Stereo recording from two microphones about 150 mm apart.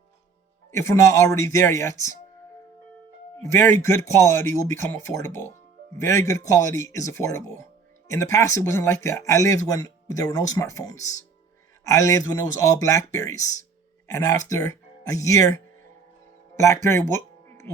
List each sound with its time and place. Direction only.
0.8 s speech: 20° left (ahead or behind)
3.4 s speech: 20° left (ahead or behind)
16.8 s music: 20° left (ahead or behind)